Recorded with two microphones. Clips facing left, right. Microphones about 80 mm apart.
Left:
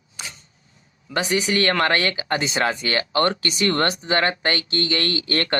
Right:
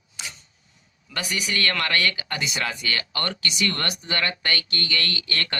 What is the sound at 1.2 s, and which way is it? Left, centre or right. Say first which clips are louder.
Speech: left 7 dB; left.